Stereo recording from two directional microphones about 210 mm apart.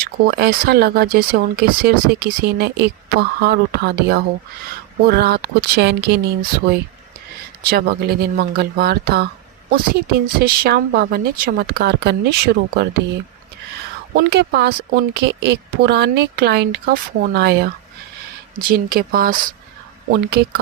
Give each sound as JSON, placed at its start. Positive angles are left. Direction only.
{"t": 0.0, "sound": "speech", "side_deg": -50}
{"t": 14.2, "sound": "speech", "side_deg": -50}
{"t": 18.7, "sound": "speech", "side_deg": -45}